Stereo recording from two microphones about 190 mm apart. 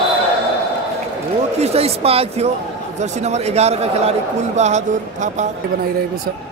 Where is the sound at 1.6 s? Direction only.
30° right (ahead or behind).